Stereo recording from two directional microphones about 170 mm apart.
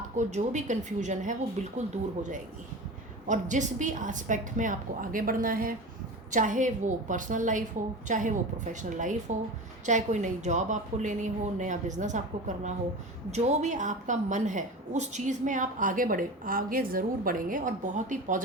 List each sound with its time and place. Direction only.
0.2 s a woman's voice: 45° right (ahead or behind)
3.2 s a woman's voice: 45° right (ahead or behind)